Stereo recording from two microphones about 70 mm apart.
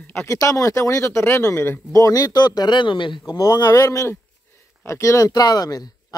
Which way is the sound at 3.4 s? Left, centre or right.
Left.